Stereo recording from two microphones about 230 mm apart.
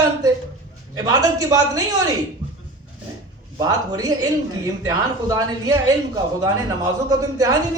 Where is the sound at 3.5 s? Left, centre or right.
Centre.